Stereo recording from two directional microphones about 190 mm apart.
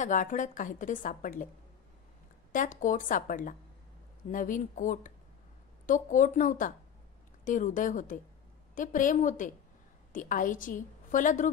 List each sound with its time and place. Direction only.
0.0 s a woman's voice: 40° left (ahead or behind)
2.5 s a woman's voice: 45° left (ahead or behind)